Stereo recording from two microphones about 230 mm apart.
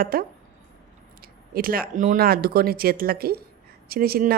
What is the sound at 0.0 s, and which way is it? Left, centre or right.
Speech, right.